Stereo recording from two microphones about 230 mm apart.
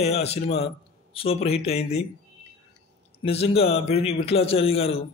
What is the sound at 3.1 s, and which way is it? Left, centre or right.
Speech, left.